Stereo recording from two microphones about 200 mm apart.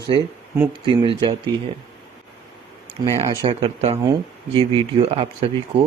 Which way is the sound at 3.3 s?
25° right (ahead or behind).